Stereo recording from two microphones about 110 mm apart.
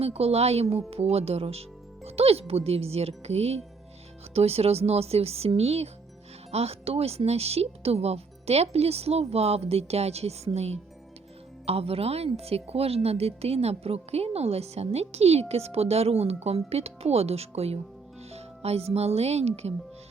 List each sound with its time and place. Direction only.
0.0 s speech: 65° right (ahead or behind)
11.6 s speech: 65° right (ahead or behind)